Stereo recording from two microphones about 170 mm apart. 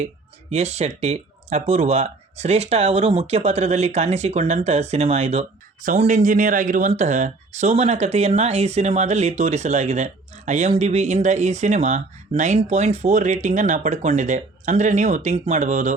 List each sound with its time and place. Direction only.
0.5 s speech: 40° right (ahead or behind)